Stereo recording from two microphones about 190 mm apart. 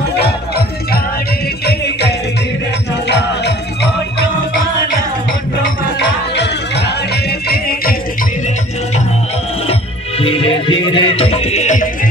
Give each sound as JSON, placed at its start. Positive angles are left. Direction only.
{"t": 0.1, "sound": "music", "side_deg": 55}
{"t": 5.9, "sound": "music", "side_deg": 65}
{"t": 9.7, "sound": "music", "side_deg": 30}